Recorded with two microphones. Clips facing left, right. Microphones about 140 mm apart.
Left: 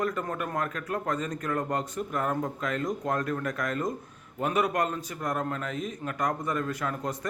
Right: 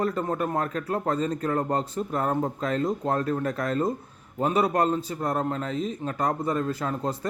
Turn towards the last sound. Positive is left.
turn(degrees=-30)  # may be behind; listen again after turning